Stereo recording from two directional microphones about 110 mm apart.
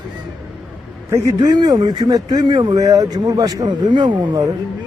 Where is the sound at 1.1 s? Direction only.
30° right (ahead or behind).